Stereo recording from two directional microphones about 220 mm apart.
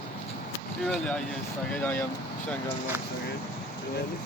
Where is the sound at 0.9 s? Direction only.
5° left (ahead or behind).